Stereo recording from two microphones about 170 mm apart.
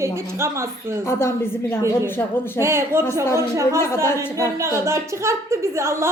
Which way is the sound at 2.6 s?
15° right (ahead or behind).